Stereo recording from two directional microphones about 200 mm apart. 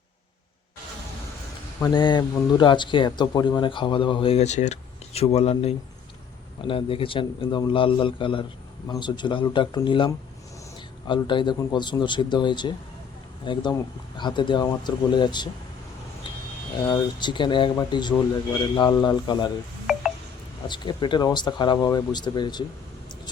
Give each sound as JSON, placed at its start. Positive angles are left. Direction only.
{"t": 1.8, "sound": "speech", "side_deg": 20}
{"t": 16.8, "sound": "speech", "side_deg": 20}
{"t": 19.9, "sound": "wind chime", "side_deg": 0}
{"t": 20.7, "sound": "speech", "side_deg": 25}